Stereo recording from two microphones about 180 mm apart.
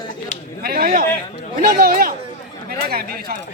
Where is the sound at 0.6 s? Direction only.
55° right (ahead or behind).